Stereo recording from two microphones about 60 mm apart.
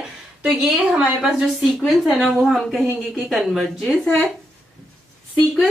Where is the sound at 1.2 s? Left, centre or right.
Centre.